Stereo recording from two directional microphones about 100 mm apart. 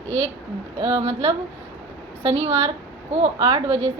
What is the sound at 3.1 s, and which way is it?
Speech, 70° right (ahead or behind).